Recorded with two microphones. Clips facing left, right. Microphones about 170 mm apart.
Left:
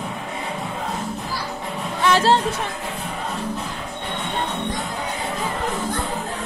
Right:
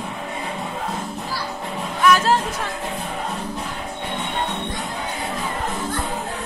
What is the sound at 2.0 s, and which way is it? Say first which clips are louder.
Speech: even; 30° left (ahead or behind).